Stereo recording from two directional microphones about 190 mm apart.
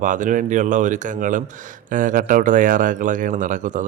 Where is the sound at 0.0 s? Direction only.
45° right (ahead or behind).